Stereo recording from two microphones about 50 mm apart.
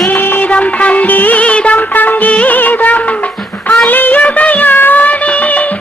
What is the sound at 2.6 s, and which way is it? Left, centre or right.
Music of bollywood, left.